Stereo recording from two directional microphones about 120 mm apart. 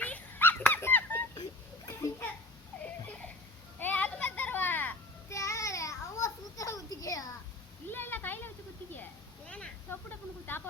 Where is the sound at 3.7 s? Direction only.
15° left (ahead or behind).